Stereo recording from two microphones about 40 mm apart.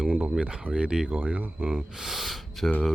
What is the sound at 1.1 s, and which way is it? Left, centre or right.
Speech, right.